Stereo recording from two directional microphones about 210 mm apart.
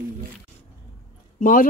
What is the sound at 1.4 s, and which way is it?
Speech, 40° left (ahead or behind).